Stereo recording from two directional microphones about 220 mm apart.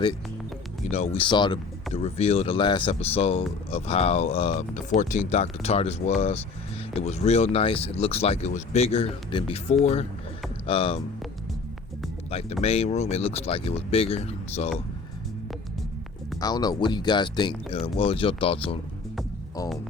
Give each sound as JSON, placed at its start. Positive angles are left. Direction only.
{"t": 0.9, "sound": "speech", "side_deg": 30}
{"t": 12.3, "sound": "speech", "side_deg": 25}
{"t": 16.4, "sound": "speech", "side_deg": 20}